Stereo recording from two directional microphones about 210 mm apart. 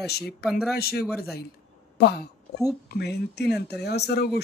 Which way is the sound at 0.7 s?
45° left (ahead or behind).